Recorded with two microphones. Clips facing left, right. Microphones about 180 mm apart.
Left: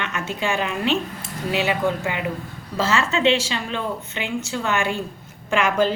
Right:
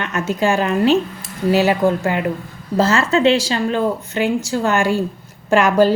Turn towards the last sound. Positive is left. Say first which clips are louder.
# right 6 dB
turn(degrees=-40)  # may be behind; listen again after turning